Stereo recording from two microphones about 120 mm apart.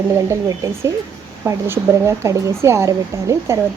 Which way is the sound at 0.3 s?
25° right (ahead or behind).